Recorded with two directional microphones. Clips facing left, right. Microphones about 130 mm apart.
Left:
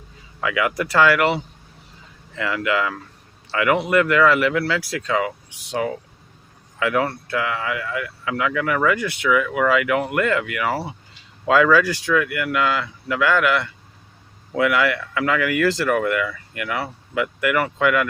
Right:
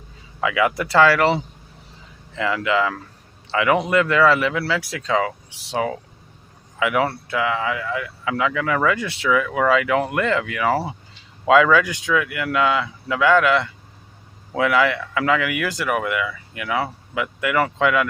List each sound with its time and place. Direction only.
0.4 s speech: 25° right (ahead or behind)
6.7 s speech: 15° right (ahead or behind)